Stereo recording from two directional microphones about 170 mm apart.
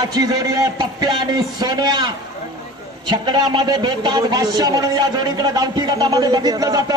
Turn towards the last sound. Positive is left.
turn(degrees=-20)  # may be behind; listen again after turning